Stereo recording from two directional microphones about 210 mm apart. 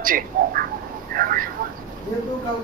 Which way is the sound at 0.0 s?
40° right (ahead or behind).